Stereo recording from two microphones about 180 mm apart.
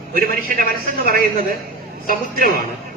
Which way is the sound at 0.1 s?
55° right (ahead or behind).